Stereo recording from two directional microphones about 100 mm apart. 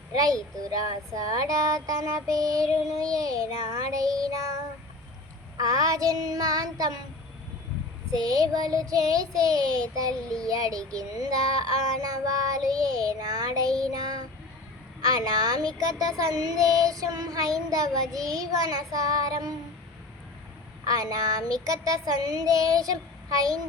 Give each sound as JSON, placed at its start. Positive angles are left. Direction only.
{"t": 0.2, "sound": "child singing", "side_deg": -35}
{"t": 5.5, "sound": "child singing", "side_deg": -40}
{"t": 8.1, "sound": "child singing", "side_deg": -40}
{"t": 20.8, "sound": "child singing", "side_deg": -40}